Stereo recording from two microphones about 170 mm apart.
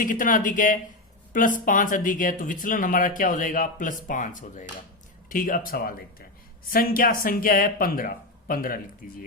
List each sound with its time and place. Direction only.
0.0 s speech: 50° left (ahead or behind)